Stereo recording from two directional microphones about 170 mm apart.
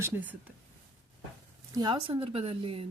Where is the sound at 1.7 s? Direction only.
30° right (ahead or behind).